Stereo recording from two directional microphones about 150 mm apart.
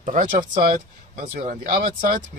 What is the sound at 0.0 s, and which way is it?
Speech, 60° right (ahead or behind).